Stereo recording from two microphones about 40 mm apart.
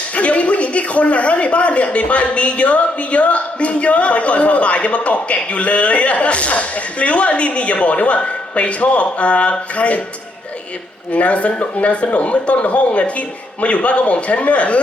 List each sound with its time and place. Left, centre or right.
0.2 s a man's voice: left
11.1 s a man's voice: left